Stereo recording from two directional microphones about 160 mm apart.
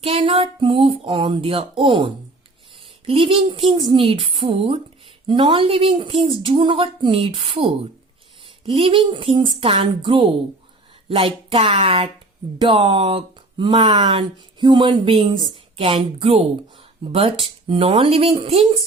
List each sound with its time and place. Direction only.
0.0 s speech: 35° right (ahead or behind)